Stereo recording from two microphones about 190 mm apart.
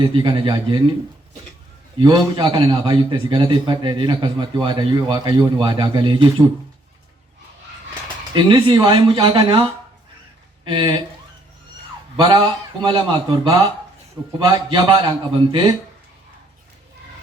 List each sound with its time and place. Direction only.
0.0 s a man's voice: 25° right (ahead or behind)
2.0 s a man's voice: 25° right (ahead or behind)
8.3 s a man's voice: 25° right (ahead or behind)
10.7 s a man's voice: 25° right (ahead or behind)
12.1 s a man's voice: 25° right (ahead or behind)